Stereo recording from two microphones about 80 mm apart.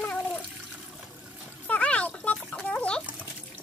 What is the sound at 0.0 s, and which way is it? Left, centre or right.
Water, centre.